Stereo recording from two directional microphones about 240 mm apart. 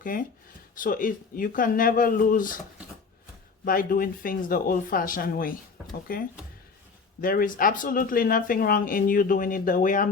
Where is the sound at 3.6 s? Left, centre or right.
Left.